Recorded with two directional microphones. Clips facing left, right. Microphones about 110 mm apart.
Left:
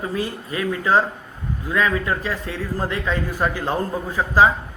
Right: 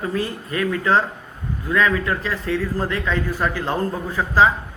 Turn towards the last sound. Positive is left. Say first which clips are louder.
# even
turn(degrees=15)  # may be behind; listen again after turning